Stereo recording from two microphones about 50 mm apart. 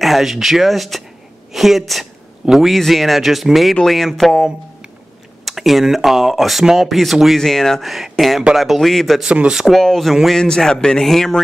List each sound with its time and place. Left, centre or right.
0.0 s a woman's voice: centre
2.7 s speech: centre
7.3 s a man's voice: centre
7.8 s speech: centre
9.2 s speech: centre
9.8 s a man's voice: centre